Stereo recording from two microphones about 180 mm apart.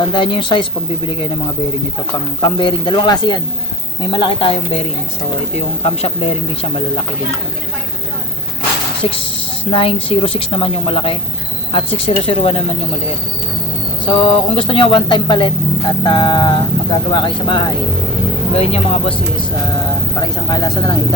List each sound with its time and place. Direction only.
0.1 s speech: 30° left (ahead or behind)
2.6 s speech: 25° left (ahead or behind)
5.5 s a woman's voice: 35° left (ahead or behind)
9.0 s a woman's voice: 30° left (ahead or behind)
14.0 s a woman's voice: 30° left (ahead or behind)
20.2 s speech: 20° left (ahead or behind)